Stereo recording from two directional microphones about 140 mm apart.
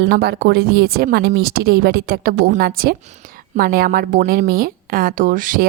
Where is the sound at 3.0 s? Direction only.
55° right (ahead or behind).